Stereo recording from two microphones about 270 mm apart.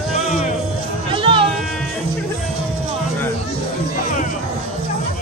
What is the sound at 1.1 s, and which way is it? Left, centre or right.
Music, centre.